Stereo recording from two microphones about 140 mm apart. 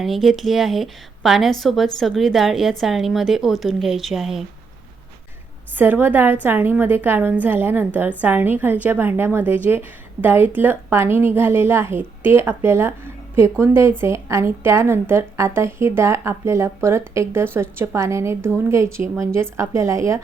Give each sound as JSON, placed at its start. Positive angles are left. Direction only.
{"t": 0.0, "sound": "a woman's voice", "side_deg": 0}
{"t": 5.7, "sound": "a woman's voice", "side_deg": -15}